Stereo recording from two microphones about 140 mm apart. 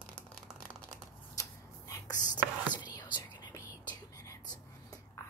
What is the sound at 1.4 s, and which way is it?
Shuffling cards, 25° left (ahead or behind).